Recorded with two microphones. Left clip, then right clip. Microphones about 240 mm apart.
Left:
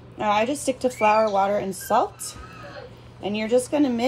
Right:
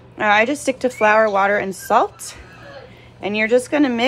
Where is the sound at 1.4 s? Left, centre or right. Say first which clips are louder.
Right 5 dB; right.